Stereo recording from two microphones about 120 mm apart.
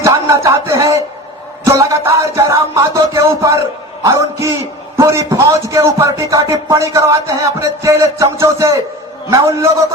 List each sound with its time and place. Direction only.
0.0 s a sound: 25° right (ahead or behind)
1.6 s music: 25° right (ahead or behind)
4.0 s a man's voice: 25° right (ahead or behind)